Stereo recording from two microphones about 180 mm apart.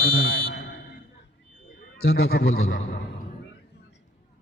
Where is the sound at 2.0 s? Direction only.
65° left (ahead or behind).